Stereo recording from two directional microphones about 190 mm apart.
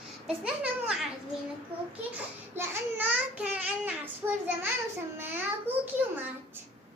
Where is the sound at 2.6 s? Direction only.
10° right (ahead or behind).